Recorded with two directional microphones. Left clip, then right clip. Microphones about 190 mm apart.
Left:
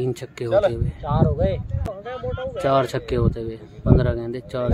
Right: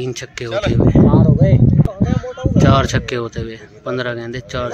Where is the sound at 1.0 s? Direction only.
50° right (ahead or behind).